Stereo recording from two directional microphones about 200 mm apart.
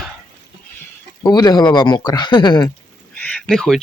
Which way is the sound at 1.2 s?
20° left (ahead or behind).